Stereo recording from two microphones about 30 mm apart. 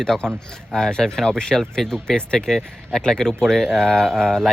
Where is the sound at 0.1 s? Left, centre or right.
Centre.